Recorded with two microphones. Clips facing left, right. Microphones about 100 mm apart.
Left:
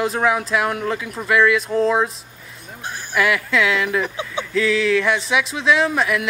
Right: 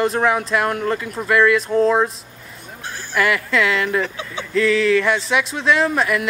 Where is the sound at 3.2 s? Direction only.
Centre (ahead or behind).